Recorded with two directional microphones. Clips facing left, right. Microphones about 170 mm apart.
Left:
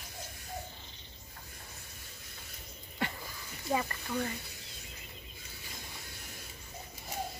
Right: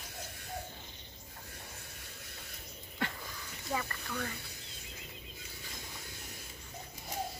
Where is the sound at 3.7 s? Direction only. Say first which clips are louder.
Left 5 dB; 25° left (ahead or behind).